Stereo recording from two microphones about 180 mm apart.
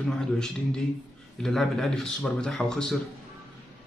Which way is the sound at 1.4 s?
Centre (ahead or behind).